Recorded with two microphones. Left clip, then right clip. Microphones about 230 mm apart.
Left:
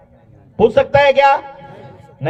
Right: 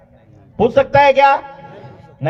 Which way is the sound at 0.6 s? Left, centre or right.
Left.